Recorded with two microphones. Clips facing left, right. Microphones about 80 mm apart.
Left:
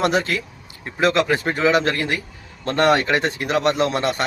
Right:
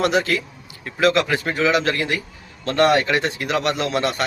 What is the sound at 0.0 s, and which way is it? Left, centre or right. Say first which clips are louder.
A man's voice: right 1 dB; left.